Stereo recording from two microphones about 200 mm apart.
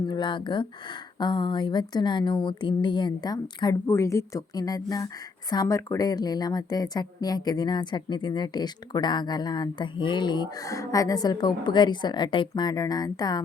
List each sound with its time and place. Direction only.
0.0 s speech: 20° left (ahead or behind)